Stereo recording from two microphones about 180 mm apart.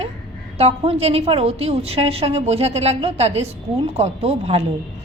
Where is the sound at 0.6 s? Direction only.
35° right (ahead or behind).